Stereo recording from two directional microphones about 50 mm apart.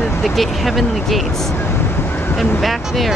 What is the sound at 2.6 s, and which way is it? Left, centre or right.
Speech, centre.